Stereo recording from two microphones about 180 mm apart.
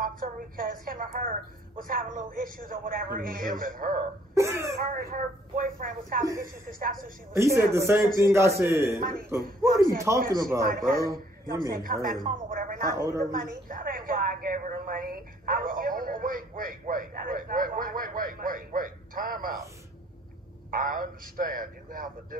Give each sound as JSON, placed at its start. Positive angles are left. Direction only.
{"t": 0.0, "sound": "a woman's voice", "side_deg": -50}
{"t": 4.4, "sound": "a man's voice", "side_deg": -15}
{"t": 4.9, "sound": "a woman's voice", "side_deg": -50}
{"t": 7.3, "sound": "a man's voice", "side_deg": -15}
{"t": 10.6, "sound": "a woman's voice", "side_deg": -55}
{"t": 12.9, "sound": "a man's voice", "side_deg": -15}
{"t": 13.4, "sound": "a woman's voice", "side_deg": -50}
{"t": 20.7, "sound": "a woman's voice", "side_deg": -50}